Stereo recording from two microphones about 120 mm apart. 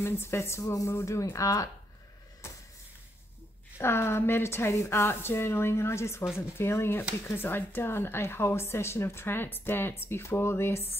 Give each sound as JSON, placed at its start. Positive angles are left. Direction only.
{"t": 0.0, "sound": "a woman's voice", "side_deg": 20}
{"t": 3.7, "sound": "a woman's voice", "side_deg": 20}